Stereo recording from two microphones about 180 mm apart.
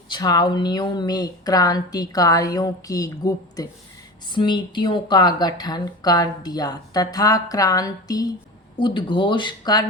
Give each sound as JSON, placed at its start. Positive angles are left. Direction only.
{"t": 0.1, "sound": "speech", "side_deg": 25}